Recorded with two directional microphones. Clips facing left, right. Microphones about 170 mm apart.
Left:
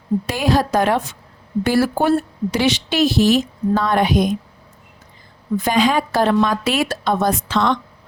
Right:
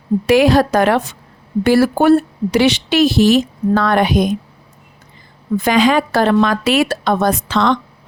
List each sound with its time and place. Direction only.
0.3 s speech: 80° right
5.6 s speech: 80° right